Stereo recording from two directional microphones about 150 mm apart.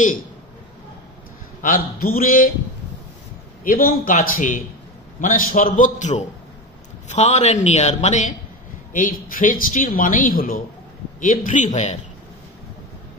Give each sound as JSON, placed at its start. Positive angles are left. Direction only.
{"t": 1.6, "sound": "speech", "side_deg": 70}
{"t": 3.6, "sound": "a man's voice", "side_deg": 70}
{"t": 8.9, "sound": "speech", "side_deg": 65}
{"t": 11.1, "sound": "a man's voice", "side_deg": 60}